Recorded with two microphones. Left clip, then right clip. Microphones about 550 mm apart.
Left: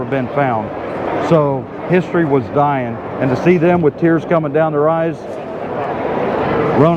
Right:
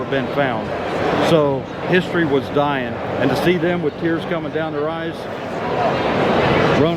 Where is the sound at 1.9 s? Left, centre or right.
Left.